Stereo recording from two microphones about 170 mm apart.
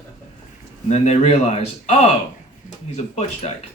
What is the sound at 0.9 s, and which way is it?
Speech, 40° left (ahead or behind).